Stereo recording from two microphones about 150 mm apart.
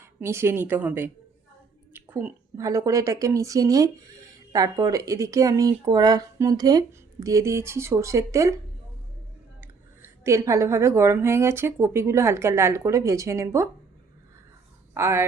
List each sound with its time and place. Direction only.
0.0 s speech: 15° right (ahead or behind)
1.9 s a sound: 10° right (ahead or behind)
2.6 s speech: 20° right (ahead or behind)
9.6 s speech: 15° right (ahead or behind)
14.9 s speech: 15° right (ahead or behind)